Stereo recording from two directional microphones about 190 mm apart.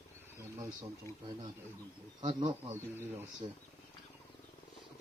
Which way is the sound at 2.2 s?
30° right (ahead or behind).